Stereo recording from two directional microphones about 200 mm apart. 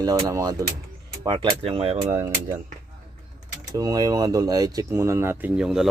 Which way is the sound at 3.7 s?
20° right (ahead or behind).